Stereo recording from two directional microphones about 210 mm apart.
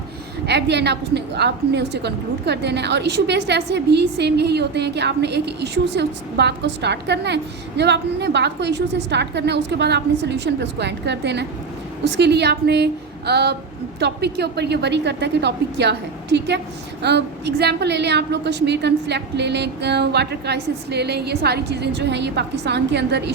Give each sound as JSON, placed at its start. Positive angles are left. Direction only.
{"t": 0.4, "sound": "a woman's voice", "side_deg": -55}